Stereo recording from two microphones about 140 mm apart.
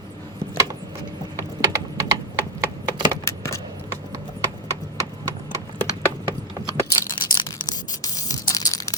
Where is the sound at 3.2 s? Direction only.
20° left (ahead or behind).